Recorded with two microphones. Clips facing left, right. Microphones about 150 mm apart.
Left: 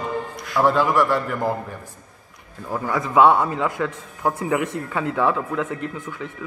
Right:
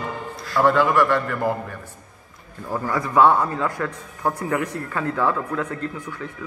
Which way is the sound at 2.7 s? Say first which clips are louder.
Even; centre (ahead or behind).